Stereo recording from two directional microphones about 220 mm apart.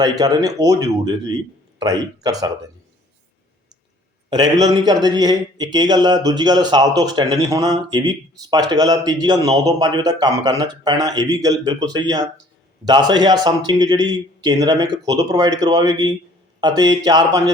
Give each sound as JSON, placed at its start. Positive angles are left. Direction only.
{"t": 0.0, "sound": "speech", "side_deg": -15}
{"t": 4.3, "sound": "a man's voice", "side_deg": -20}